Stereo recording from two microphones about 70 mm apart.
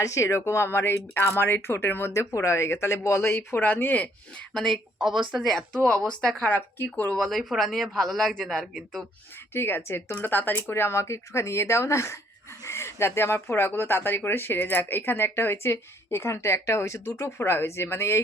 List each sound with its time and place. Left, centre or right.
0.0 s speech: left
2.1 s speech: left
4.5 s speech: centre
6.6 s speech: left
7.2 s speech: centre
9.5 s speech: left